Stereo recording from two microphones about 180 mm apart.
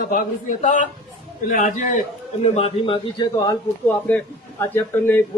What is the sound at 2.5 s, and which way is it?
A man's voice, 30° left (ahead or behind).